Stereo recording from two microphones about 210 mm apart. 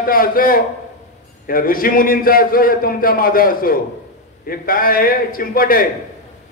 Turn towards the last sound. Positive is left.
turn(degrees=45)  # may be behind; listen again after turning